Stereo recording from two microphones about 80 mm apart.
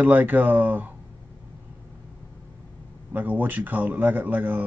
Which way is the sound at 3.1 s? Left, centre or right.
Right.